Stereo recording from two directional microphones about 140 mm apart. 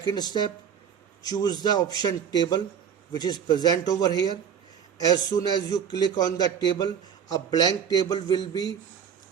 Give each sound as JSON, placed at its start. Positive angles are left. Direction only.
{"t": 0.0, "sound": "a man's voice", "side_deg": 30}